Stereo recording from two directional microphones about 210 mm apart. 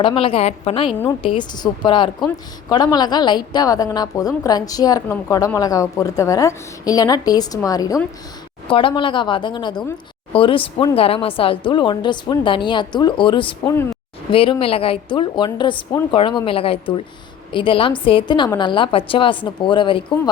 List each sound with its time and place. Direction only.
0.0 s a woman's voice: 25° left (ahead or behind)